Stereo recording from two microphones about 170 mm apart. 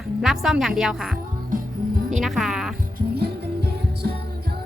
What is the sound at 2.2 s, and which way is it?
Speech, centre (ahead or behind).